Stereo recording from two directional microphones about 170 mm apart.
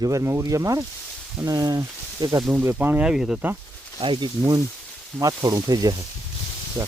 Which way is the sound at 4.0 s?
30° right (ahead or behind).